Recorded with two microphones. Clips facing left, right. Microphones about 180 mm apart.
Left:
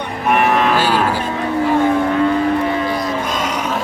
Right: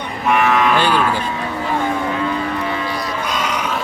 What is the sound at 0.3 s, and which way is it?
Cattle, 50° left (ahead or behind).